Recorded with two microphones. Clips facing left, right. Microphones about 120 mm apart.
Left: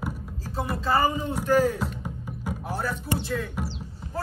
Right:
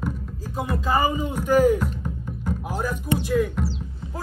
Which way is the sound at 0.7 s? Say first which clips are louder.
Right 1 dB; 15° right (ahead or behind).